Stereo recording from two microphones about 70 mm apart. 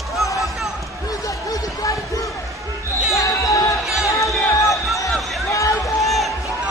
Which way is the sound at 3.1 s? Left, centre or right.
Left.